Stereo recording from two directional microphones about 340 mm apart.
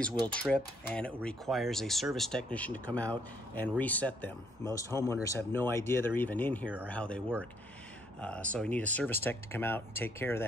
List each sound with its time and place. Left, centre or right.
0.3 s speech: centre